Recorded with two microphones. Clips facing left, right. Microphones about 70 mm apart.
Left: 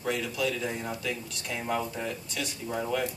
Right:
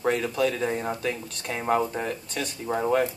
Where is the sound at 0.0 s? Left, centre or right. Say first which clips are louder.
Right 6 dB; right.